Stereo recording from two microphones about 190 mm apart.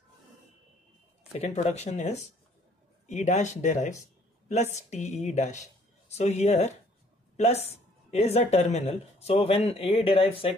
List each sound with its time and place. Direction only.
1.3 s speech: 35° left (ahead or behind)